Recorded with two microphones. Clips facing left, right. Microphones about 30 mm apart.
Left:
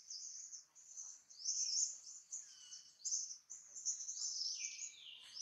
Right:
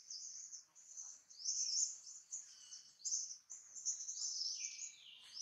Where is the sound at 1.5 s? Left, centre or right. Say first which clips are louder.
Even; centre.